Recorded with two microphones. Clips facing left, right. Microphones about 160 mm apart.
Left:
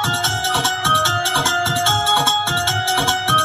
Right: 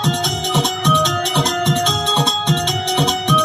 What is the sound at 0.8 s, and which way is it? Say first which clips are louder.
Music: right 3 dB; centre (ahead or behind).